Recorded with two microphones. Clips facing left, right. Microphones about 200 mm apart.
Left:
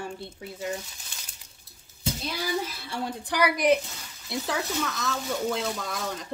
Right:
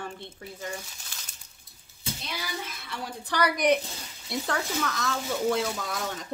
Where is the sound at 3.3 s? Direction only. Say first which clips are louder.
Left 1 dB; 5° left (ahead or behind).